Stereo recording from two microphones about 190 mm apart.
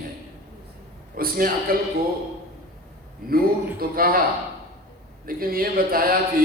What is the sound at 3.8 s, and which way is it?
Speech, 50° right (ahead or behind).